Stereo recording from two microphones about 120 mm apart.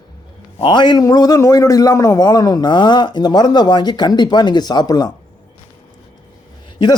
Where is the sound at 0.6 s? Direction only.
40° left (ahead or behind).